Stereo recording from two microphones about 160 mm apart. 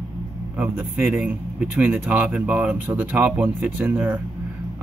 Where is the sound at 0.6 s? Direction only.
10° right (ahead or behind).